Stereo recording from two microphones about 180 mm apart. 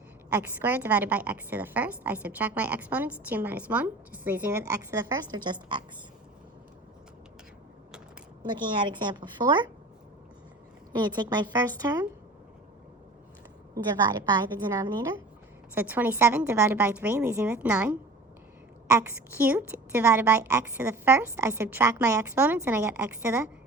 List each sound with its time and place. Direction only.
0.4 s a woman's voice: 10° right (ahead or behind); by 5.8 s 25° right (ahead or behind)
8.4 s a woman's voice: 25° right (ahead or behind)
10.9 s a woman's voice: 25° right (ahead or behind)
14.1 s a woman's voice: 25° right (ahead or behind)
15.7 s a woman's voice: 10° right (ahead or behind)